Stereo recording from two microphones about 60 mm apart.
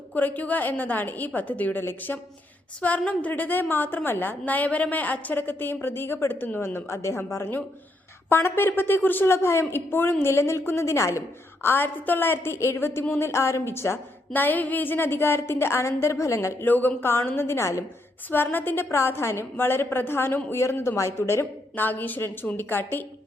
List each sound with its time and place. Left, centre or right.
0.1 s a woman's voice: left
1.8 s a woman's voice: left
3.1 s a woman's voice: left
11.6 s a woman's voice: left
16.6 s a woman's voice: left
18.3 s a woman's voice: left
21.8 s a woman's voice: left